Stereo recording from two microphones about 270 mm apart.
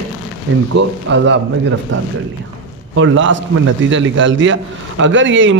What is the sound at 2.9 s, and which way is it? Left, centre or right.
A man's voice, right.